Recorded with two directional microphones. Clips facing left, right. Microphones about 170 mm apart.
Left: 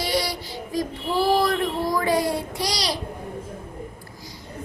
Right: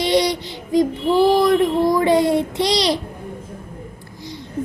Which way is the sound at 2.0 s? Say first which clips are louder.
Right 7 dB; 25° right (ahead or behind).